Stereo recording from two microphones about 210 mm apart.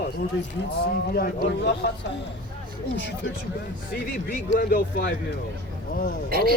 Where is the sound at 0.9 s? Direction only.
45° left (ahead or behind).